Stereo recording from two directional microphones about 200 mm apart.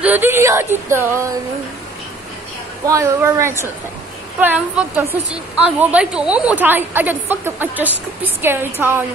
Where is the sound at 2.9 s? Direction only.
15° right (ahead or behind).